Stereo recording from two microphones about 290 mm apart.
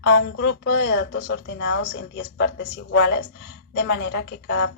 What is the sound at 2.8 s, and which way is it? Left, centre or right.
A woman's voice, left.